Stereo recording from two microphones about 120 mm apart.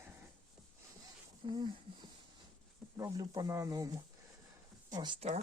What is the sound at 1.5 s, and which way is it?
Speech, 35° right (ahead or behind).